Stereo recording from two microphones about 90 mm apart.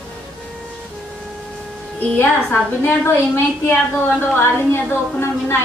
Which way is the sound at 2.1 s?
20° left (ahead or behind).